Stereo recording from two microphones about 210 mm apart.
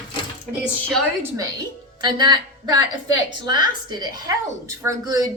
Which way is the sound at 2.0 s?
20° right (ahead or behind).